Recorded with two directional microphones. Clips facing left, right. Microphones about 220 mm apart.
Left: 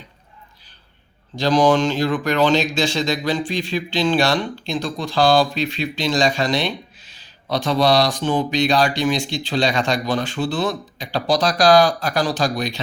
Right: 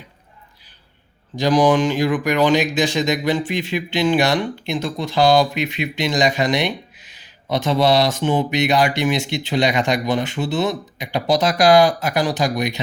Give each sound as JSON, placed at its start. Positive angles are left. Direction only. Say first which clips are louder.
{"t": 1.4, "sound": "speech", "louder": "right 1 dB", "side_deg": -15}